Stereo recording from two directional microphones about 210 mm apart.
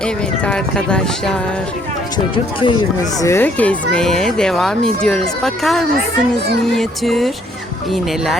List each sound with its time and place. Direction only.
0.4 s speech: 5° left (ahead or behind)
2.1 s speech: 25° left (ahead or behind); by 7.3 s centre (ahead or behind)